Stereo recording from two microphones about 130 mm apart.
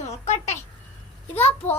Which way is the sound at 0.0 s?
55° left (ahead or behind).